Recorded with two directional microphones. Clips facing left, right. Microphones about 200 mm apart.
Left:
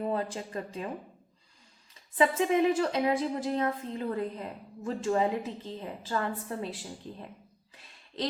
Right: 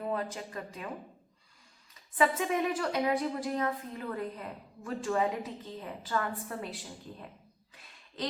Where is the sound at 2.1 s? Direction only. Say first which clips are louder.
Left 4 dB; 25° left (ahead or behind).